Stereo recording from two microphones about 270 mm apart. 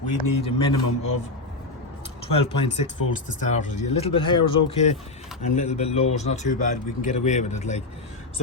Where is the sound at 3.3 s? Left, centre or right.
Left.